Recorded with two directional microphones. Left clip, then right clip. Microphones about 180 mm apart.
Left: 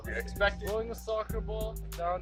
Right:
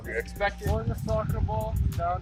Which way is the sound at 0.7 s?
Centre (ahead or behind).